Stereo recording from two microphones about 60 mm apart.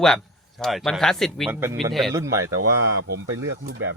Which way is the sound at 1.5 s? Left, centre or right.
Right.